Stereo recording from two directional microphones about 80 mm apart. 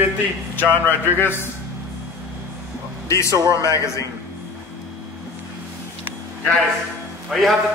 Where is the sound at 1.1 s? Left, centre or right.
Left.